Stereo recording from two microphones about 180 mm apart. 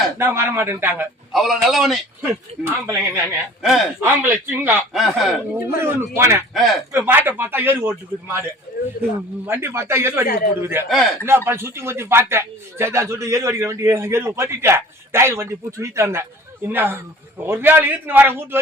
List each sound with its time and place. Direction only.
0.2 s a man's voice: 15° right (ahead or behind)
2.2 s a man's voice: 10° right (ahead or behind)
5.5 s a man's voice: 15° right (ahead or behind)
6.5 s a man's voice: centre (ahead or behind)
6.9 s a man's voice: 10° right (ahead or behind)
9.5 s a man's voice: 15° right (ahead or behind)
10.8 s a man's voice: centre (ahead or behind)
11.4 s a man's voice: 15° right (ahead or behind)